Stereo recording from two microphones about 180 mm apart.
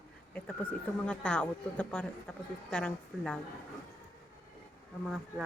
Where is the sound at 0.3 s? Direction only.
5° left (ahead or behind).